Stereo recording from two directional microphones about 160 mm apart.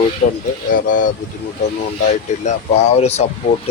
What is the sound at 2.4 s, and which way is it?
Speech, 40° left (ahead or behind).